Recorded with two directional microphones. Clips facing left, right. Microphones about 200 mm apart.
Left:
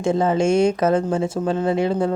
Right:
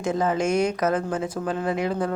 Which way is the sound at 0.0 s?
30° left (ahead or behind).